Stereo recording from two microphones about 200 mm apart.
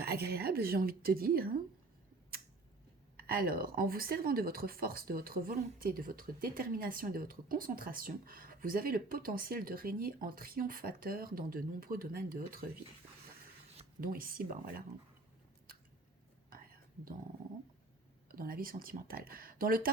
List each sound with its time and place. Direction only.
0.0 s speech: 50° right (ahead or behind)
3.2 s speech: 50° right (ahead or behind)
14.0 s speech: 45° right (ahead or behind)
18.3 s speech: 45° right (ahead or behind)